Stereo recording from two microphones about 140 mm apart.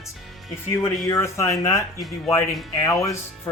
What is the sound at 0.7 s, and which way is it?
Speech, 20° left (ahead or behind).